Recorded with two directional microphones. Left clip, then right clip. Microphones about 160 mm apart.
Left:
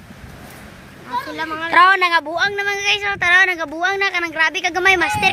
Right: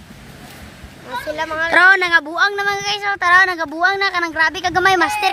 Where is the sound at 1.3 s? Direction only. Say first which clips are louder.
Right 1 dB; 50° right (ahead or behind); by 2.0 s 35° right (ahead or behind).